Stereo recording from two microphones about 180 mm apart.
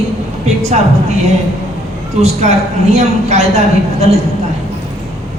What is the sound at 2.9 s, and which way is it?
Speech, 40° right (ahead or behind).